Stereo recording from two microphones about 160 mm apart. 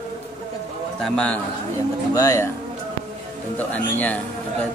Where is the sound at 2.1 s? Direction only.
20° left (ahead or behind).